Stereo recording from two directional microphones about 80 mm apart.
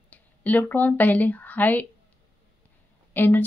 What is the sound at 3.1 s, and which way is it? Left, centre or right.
Speech, left.